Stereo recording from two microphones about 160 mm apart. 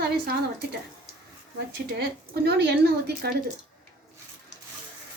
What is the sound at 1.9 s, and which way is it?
Speech, 90° right.